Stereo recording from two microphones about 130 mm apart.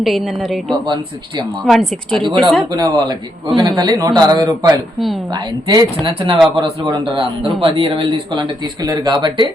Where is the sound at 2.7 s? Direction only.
30° right (ahead or behind).